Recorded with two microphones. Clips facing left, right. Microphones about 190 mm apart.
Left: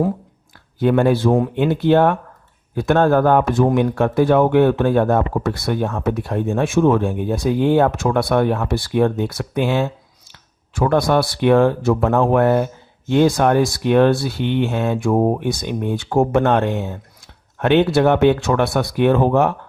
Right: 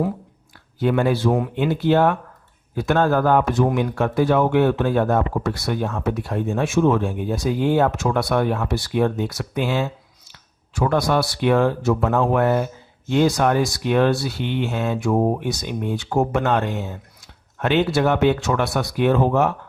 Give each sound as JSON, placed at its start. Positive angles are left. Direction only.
{"t": 0.8, "sound": "speech", "side_deg": 50}